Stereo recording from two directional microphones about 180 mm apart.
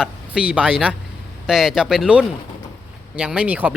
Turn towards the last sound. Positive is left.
turn(degrees=-10)  # may be behind; listen again after turning